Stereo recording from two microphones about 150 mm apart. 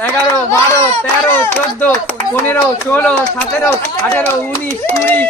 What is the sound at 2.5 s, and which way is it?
Speech, 15° left (ahead or behind).